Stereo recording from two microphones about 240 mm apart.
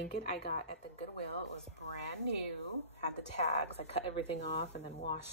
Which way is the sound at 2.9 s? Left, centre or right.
Left.